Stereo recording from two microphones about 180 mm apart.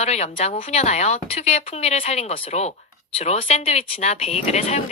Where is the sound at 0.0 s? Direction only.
35° left (ahead or behind).